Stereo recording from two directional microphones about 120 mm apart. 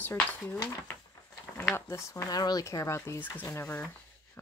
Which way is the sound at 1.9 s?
25° left (ahead or behind).